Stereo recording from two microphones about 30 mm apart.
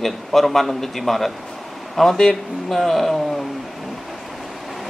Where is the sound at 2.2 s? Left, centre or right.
Centre.